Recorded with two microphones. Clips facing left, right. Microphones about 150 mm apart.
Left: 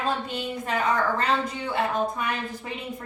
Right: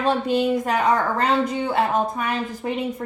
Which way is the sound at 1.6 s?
55° right (ahead or behind).